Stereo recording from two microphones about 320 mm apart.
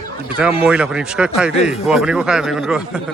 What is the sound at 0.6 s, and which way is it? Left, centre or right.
A man's voice, centre.